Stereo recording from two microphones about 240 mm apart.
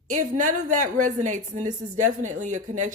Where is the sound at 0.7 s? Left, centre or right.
Right.